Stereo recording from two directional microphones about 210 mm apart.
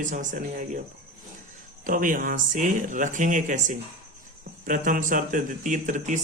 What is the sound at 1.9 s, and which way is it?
A man's voice, 40° right (ahead or behind).